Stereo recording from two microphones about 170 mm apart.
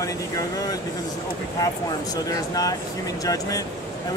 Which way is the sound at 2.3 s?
20° left (ahead or behind).